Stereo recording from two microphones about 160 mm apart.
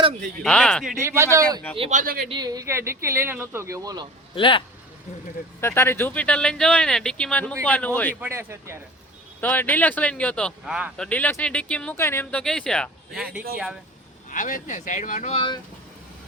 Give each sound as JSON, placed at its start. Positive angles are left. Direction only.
{"t": 0.4, "sound": "speech", "side_deg": 5}
{"t": 0.9, "sound": "speech", "side_deg": -15}
{"t": 1.9, "sound": "speech", "side_deg": -50}
{"t": 2.3, "sound": "speech", "side_deg": -25}
{"t": 4.4, "sound": "speech", "side_deg": 30}
{"t": 5.5, "sound": "speech", "side_deg": 15}
{"t": 8.2, "sound": "speech", "side_deg": -15}
{"t": 9.4, "sound": "speech", "side_deg": 10}
{"t": 14.3, "sound": "speech", "side_deg": 55}
{"t": 15.4, "sound": "speech", "side_deg": 30}